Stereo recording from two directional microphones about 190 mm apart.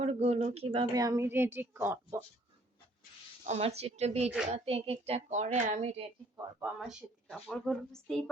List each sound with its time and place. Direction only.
0.0 s a woman's voice: 35° right (ahead or behind); by 2.2 s 15° right (ahead or behind)
3.4 s speech: 35° right (ahead or behind)
6.3 s a woman's voice: 5° right (ahead or behind)